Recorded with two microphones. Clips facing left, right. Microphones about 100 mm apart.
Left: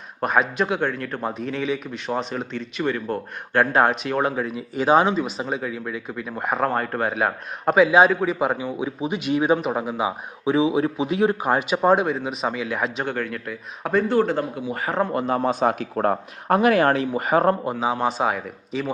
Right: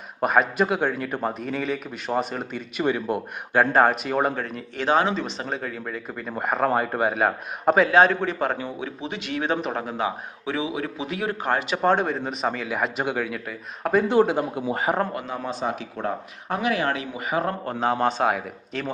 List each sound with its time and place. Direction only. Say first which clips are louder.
0.2 s speech: right 1 dB; 5° right (ahead or behind)
3.6 s speech: even; centre (ahead or behind); by 5.2 s 15° left (ahead or behind)
5.2 s a man's voice: left 3 dB; 5° left (ahead or behind)
14.1 s speech: right 1 dB; 15° right (ahead or behind)
15.4 s speech: left 7 dB; 50° left (ahead or behind)
17.7 s speech: even; 5° left (ahead or behind)